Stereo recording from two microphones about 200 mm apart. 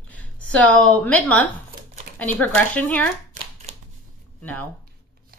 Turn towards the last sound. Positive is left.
turn(degrees=-30)  # may be behind; listen again after turning